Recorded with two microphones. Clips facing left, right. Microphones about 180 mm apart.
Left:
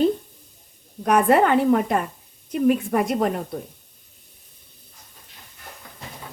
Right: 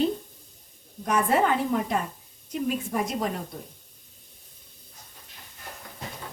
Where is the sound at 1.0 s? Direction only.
65° left (ahead or behind).